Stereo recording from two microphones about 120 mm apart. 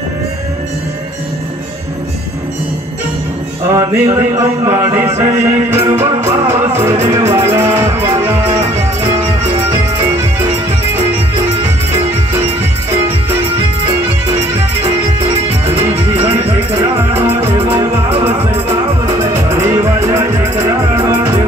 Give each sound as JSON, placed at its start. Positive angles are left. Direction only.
{"t": 3.6, "sound": "music", "side_deg": -25}
{"t": 9.1, "sound": "music", "side_deg": -65}
{"t": 9.6, "sound": "music", "side_deg": -20}
{"t": 12.9, "sound": "music", "side_deg": -20}
{"t": 15.3, "sound": "music", "side_deg": -60}
{"t": 16.7, "sound": "music", "side_deg": -20}